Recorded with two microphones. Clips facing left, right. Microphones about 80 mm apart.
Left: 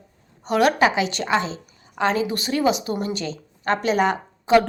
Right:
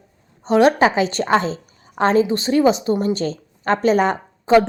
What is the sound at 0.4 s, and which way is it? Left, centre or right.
A woman's voice, right.